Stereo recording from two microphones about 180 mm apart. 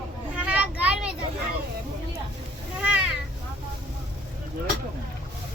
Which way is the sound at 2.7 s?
5° right (ahead or behind).